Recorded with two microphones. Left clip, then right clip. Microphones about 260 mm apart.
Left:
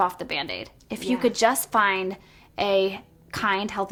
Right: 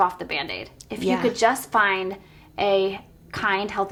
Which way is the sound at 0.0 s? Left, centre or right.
Left.